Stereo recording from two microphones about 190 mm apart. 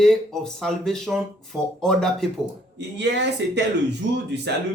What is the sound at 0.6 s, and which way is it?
Speech, centre (ahead or behind).